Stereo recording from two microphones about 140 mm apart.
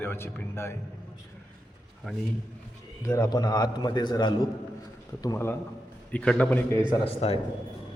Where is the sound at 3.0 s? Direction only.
25° left (ahead or behind).